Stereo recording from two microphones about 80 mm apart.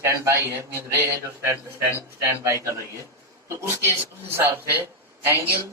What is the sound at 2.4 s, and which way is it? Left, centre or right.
Speech, right.